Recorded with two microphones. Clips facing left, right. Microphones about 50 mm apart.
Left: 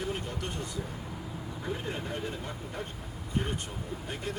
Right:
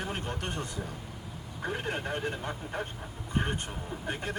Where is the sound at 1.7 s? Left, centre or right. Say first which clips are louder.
Right 4 dB; right.